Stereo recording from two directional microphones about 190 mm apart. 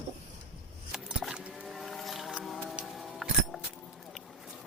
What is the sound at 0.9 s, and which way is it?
Music, 5° right (ahead or behind).